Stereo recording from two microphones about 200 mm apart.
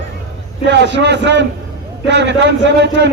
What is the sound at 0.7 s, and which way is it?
A man's voice, 60° right (ahead or behind).